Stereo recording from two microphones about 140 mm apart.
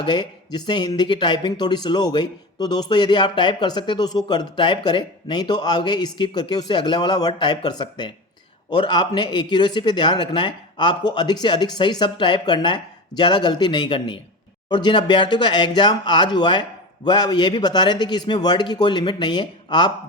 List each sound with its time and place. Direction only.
0.0 s speech: 30° left (ahead or behind)